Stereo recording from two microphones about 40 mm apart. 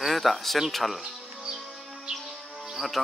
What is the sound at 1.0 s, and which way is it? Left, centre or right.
Music, centre.